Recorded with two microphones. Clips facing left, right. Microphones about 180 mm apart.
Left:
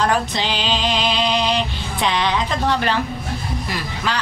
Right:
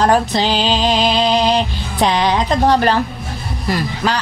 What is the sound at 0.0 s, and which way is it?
Music, 35° right (ahead or behind).